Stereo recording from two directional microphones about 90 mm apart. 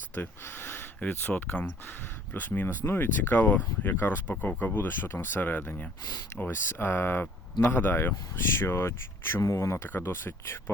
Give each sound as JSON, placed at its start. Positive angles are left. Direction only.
{"t": 0.1, "sound": "speech", "side_deg": 25}